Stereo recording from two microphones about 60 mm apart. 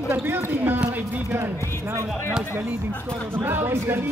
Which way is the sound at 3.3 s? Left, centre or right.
Right.